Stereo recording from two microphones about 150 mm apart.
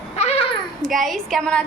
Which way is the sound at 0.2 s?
45° left (ahead or behind).